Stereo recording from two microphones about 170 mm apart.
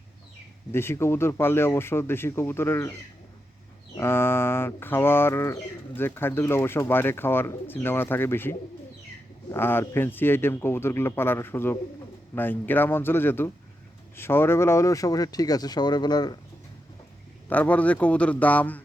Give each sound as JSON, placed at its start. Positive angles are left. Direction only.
{"t": 0.7, "sound": "speech", "side_deg": 15}
{"t": 3.9, "sound": "speech", "side_deg": 15}
{"t": 17.5, "sound": "speech", "side_deg": 10}